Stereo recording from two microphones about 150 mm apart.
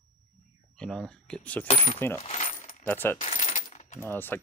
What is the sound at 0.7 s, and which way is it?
Speech, 5° left (ahead or behind).